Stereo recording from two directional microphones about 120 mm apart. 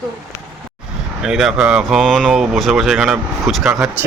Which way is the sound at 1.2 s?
5° right (ahead or behind).